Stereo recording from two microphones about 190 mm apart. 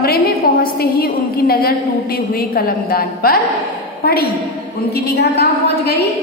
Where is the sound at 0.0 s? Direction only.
50° left (ahead or behind).